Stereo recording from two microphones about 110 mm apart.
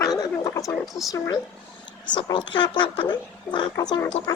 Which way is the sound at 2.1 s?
45° left (ahead or behind).